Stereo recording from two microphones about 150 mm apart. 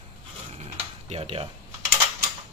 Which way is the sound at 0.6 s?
45° right (ahead or behind).